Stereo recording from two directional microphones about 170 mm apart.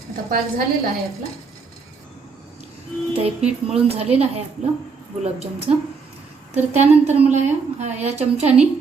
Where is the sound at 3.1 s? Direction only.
35° right (ahead or behind).